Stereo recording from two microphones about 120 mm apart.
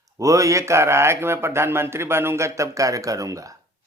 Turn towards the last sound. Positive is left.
turn(degrees=-30)  # may be behind; listen again after turning